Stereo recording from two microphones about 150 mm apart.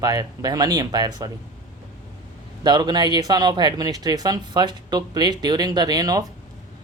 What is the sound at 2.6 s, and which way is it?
Speech, 30° right (ahead or behind).